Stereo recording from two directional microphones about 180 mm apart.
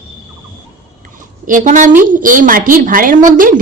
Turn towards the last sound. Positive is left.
turn(degrees=-50)  # may be behind; listen again after turning